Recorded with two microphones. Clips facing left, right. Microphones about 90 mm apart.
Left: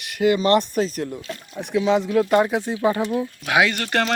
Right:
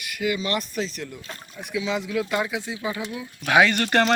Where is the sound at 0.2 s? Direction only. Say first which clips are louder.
Left 9 dB; 45° left (ahead or behind).